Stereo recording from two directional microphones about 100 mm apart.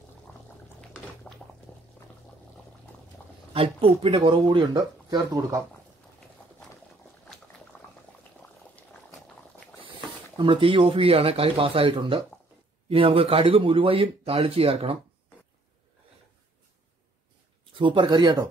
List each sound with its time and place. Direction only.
1.3 s a sound: 10° left (ahead or behind)
3.5 s speech: 70° right (ahead or behind)
4.7 s speech: 35° right (ahead or behind)
7.7 s boiling: 15° left (ahead or behind)
10.3 s speech: 60° right (ahead or behind)
17.7 s speech: 55° right (ahead or behind)